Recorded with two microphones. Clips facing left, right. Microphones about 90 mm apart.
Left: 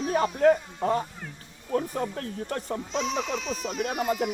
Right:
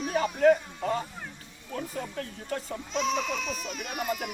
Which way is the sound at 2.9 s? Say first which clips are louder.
Right 1 dB; 25° left (ahead or behind).